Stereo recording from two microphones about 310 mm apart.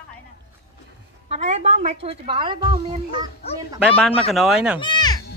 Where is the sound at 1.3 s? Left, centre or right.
Centre.